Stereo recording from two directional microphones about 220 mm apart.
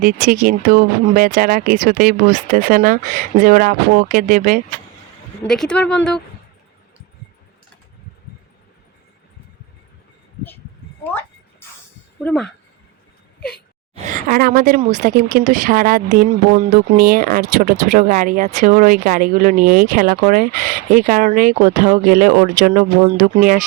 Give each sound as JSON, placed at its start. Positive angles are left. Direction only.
{"t": 0.0, "sound": "speech", "side_deg": -40}
{"t": 5.4, "sound": "speech", "side_deg": 5}
{"t": 12.2, "sound": "speech", "side_deg": 5}
{"t": 13.9, "sound": "a woman's voice", "side_deg": -40}